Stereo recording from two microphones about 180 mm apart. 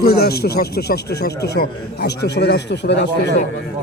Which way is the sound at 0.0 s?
60° left (ahead or behind).